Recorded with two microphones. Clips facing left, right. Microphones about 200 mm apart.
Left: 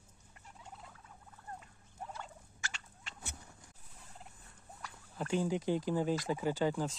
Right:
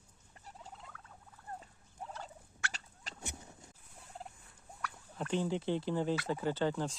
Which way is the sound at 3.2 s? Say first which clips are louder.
Right 4 dB; 25° right (ahead or behind).